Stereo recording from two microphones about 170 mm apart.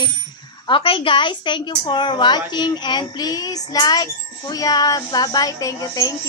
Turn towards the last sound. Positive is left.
turn(degrees=20)  # may be behind; listen again after turning